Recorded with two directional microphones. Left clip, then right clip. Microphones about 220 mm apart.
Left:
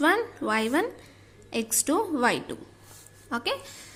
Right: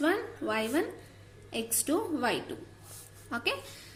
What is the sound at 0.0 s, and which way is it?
A woman's voice, 30° left (ahead or behind).